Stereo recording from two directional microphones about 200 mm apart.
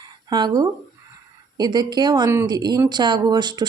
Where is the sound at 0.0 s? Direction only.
20° right (ahead or behind).